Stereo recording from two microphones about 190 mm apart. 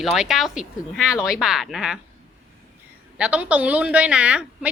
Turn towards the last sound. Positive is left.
turn(degrees=-5)  # may be behind; listen again after turning